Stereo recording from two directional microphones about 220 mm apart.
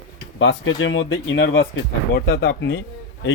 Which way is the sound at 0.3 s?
60° left (ahead or behind).